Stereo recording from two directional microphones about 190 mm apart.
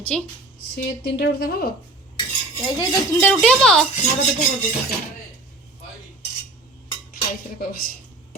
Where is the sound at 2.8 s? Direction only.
10° left (ahead or behind).